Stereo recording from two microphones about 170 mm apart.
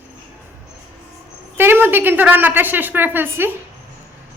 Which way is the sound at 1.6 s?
10° right (ahead or behind).